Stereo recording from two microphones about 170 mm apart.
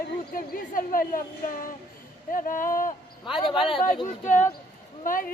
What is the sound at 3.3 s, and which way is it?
Speech, 30° left (ahead or behind).